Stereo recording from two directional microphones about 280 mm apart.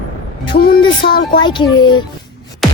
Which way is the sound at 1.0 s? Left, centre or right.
Left.